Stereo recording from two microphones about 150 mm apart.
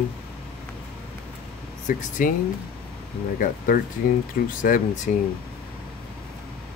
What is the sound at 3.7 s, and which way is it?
Speech, 90° left.